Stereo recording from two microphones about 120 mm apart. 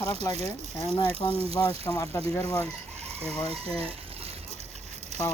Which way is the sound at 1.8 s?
25° left (ahead or behind).